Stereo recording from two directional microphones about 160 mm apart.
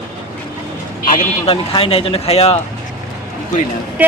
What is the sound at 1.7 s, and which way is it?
Speech, 35° left (ahead or behind).